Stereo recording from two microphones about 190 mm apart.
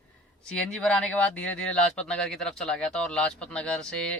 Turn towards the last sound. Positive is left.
turn(degrees=5)  # may be behind; listen again after turning